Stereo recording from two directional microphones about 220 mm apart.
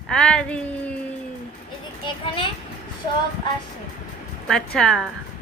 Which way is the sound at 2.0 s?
20° left (ahead or behind).